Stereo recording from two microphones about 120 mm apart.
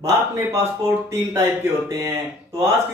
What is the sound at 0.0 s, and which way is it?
Speech, 20° right (ahead or behind).